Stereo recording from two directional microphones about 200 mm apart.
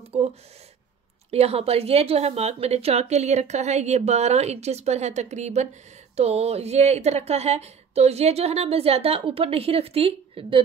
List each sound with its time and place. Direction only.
0.1 s speech: 30° right (ahead or behind)